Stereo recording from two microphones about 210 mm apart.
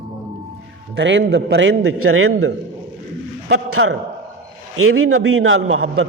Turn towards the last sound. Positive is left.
turn(degrees=-70)  # may be behind; listen again after turning